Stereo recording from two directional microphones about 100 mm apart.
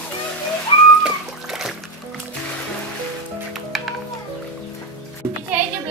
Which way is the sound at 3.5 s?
Centre (ahead or behind).